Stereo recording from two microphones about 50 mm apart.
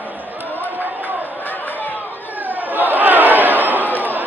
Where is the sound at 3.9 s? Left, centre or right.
Right.